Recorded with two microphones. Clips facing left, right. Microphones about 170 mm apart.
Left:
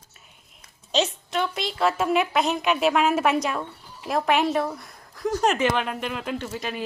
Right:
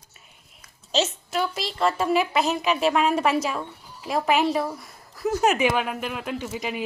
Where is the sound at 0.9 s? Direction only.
Centre (ahead or behind).